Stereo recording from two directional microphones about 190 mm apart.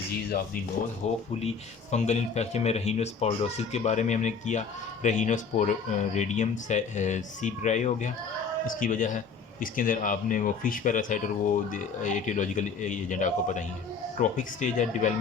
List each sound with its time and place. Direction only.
1.0 s a man's voice: 35° left (ahead or behind)